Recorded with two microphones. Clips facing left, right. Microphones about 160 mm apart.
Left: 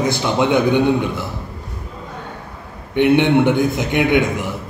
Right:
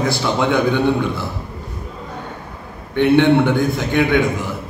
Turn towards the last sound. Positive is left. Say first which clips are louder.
# even
turn(degrees=20)  # may be behind; listen again after turning